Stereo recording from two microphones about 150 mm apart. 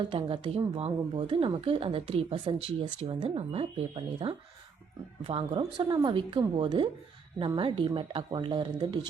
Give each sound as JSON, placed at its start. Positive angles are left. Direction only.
{"t": 0.1, "sound": "speech", "side_deg": -35}